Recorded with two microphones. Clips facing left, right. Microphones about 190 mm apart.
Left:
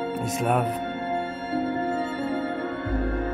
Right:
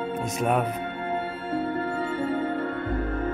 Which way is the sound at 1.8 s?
45° left (ahead or behind).